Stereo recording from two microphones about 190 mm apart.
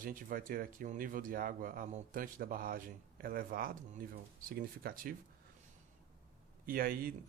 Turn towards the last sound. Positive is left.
turn(degrees=-50)  # may be behind; listen again after turning